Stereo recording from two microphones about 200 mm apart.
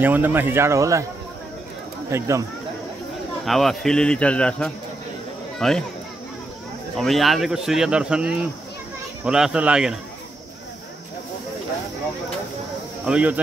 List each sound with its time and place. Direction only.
0.0 s speech: 10° right (ahead or behind)
2.0 s speech: 15° right (ahead or behind)
3.4 s speech: centre (ahead or behind)
7.0 s speech: centre (ahead or behind)
13.0 s speech: 5° right (ahead or behind)